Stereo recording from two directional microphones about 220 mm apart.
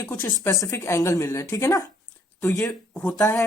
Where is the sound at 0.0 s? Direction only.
15° left (ahead or behind).